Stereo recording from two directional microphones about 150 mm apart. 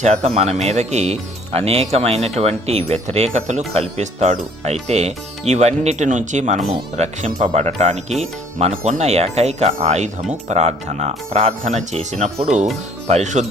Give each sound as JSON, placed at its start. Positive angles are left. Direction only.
{"t": 0.0, "sound": "speech", "side_deg": -50}